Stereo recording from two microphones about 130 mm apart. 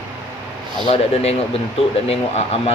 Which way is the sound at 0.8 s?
50° left (ahead or behind).